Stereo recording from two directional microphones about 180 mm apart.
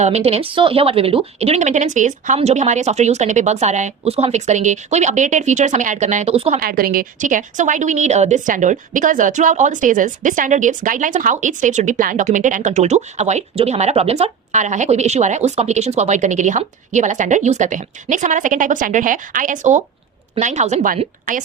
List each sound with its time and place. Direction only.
0.0 s speech: 35° right (ahead or behind)
6.6 s a woman's voice: 55° right (ahead or behind)